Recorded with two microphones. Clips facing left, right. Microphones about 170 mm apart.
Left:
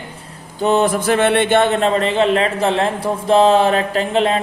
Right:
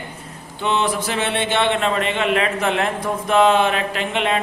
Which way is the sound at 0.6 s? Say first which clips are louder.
Left 6 dB; 45° left (ahead or behind).